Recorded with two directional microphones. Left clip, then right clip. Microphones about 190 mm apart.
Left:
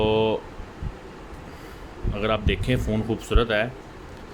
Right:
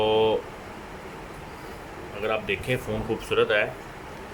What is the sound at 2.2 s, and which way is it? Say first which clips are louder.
Speech: left 2 dB; 30° left (ahead or behind).